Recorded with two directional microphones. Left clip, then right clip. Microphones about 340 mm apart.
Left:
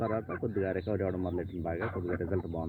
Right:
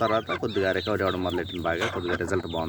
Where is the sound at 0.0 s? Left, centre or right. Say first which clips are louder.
Right 9 dB; centre.